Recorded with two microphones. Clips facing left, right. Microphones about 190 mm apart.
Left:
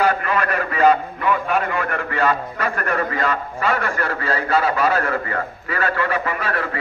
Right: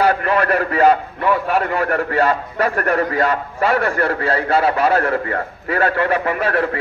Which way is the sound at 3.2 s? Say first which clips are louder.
Right 4 dB; 60° right (ahead or behind).